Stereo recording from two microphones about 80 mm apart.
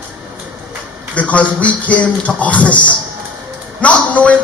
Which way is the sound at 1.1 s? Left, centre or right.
Centre.